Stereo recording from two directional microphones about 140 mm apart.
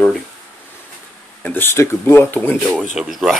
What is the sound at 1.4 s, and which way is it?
Speech, 15° left (ahead or behind).